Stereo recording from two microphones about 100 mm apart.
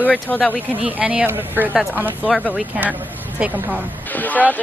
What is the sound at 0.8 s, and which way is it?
Speech, 15° right (ahead or behind).